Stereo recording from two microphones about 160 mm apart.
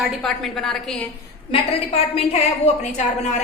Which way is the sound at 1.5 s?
35° left (ahead or behind).